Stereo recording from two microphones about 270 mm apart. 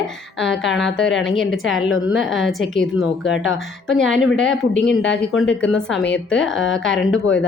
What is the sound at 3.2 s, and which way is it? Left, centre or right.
Speech, left.